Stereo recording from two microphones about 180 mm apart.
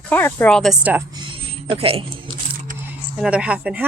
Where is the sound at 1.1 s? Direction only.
30° right (ahead or behind).